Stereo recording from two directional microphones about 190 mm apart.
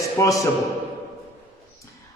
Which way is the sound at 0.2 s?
20° left (ahead or behind).